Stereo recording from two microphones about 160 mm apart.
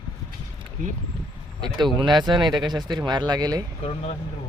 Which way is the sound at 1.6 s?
30° right (ahead or behind).